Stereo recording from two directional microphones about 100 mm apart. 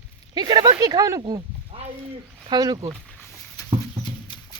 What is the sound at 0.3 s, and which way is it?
Speech, 45° right (ahead or behind).